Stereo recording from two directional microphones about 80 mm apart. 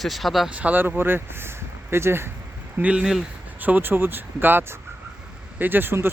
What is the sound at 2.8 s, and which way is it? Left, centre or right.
Speech, centre.